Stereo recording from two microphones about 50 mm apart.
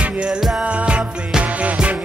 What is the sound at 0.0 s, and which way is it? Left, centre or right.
Music, right.